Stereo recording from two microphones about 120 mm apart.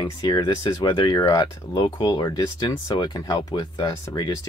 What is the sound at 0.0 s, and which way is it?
Speech, 35° left (ahead or behind).